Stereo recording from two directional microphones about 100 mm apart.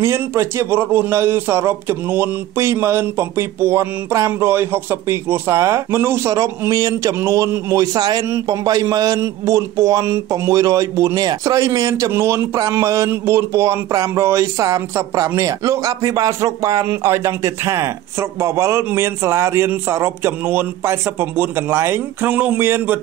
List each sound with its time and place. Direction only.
0.0 s a man's voice: 25° right (ahead or behind)